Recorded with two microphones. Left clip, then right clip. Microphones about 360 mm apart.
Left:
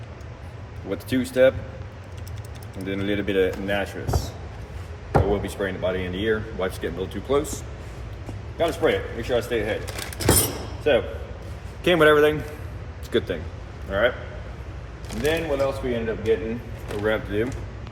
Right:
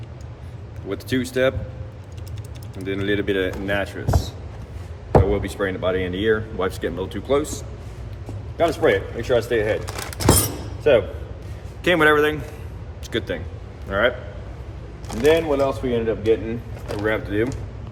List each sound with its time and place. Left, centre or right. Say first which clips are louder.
0.9 s speech: right 2 dB; centre
2.8 s speech: right 4 dB; centre
5.3 s speech: right 2 dB; centre
9.9 s keys jangling: right 3 dB; centre
10.8 s speech: right 4 dB; centre
15.3 s a man's voice: right 5 dB; centre